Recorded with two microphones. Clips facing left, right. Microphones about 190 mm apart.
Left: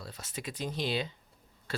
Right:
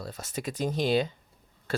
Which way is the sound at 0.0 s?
45° right (ahead or behind).